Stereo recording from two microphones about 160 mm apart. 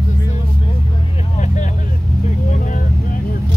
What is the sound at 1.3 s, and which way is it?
Vehicle, 50° left (ahead or behind).